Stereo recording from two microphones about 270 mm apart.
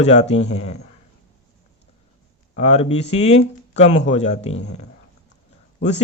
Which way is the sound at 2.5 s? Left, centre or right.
Left.